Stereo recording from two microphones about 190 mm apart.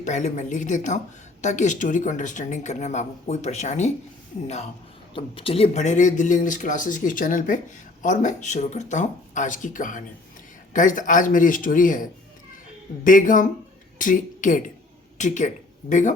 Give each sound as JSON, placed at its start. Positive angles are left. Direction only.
{"t": 0.0, "sound": "speech", "side_deg": 40}
{"t": 13.1, "sound": "speech", "side_deg": 45}